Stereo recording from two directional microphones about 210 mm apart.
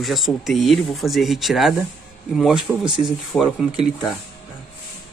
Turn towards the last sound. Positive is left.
turn(degrees=0)  # may be behind; listen again after turning